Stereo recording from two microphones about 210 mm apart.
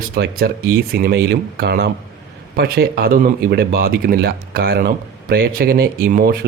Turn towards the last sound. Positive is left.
turn(degrees=-40)  # may be behind; listen again after turning